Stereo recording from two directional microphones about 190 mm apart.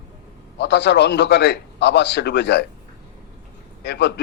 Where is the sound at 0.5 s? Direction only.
65° left (ahead or behind).